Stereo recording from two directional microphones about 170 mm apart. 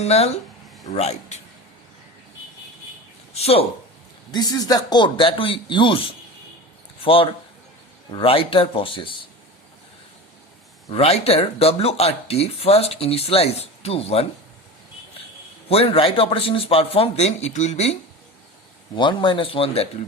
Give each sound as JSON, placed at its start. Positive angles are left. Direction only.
{"t": 0.0, "sound": "speech", "side_deg": 40}
{"t": 3.3, "sound": "speech", "side_deg": 35}
{"t": 4.3, "sound": "speech", "side_deg": 25}
{"t": 10.8, "sound": "speech", "side_deg": 35}
{"t": 15.7, "sound": "speech", "side_deg": 35}
{"t": 18.9, "sound": "speech", "side_deg": 30}